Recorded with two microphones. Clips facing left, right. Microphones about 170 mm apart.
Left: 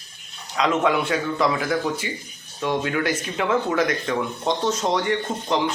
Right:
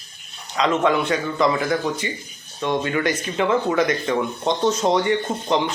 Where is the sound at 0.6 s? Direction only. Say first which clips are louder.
Right 1 dB; 5° left (ahead or behind).